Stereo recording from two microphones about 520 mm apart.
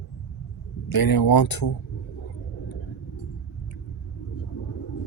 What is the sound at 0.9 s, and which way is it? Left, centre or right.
Speech, left.